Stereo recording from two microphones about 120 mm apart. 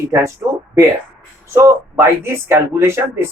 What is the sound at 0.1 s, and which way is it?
Speech, 25° right (ahead or behind).